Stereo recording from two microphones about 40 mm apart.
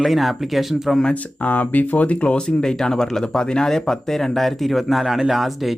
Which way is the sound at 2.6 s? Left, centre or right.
Centre.